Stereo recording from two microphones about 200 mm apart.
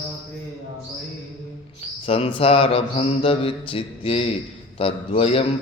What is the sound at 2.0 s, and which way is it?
Mantra, 30° left (ahead or behind).